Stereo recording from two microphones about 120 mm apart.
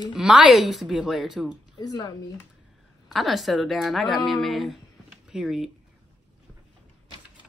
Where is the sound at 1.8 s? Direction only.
35° left (ahead or behind).